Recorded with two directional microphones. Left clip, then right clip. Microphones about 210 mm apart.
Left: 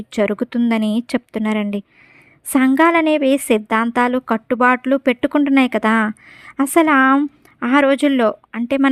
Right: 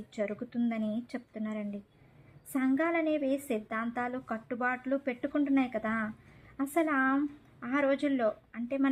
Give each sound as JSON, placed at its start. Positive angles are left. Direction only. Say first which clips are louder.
{"t": 0.1, "sound": "a woman's voice", "louder": "left 17 dB", "side_deg": 50}